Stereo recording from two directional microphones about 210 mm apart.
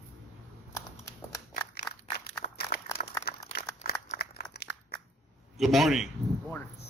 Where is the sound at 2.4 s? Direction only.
35° left (ahead or behind).